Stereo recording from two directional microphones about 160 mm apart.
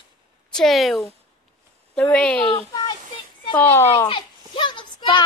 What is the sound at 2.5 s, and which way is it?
Speech, 25° left (ahead or behind).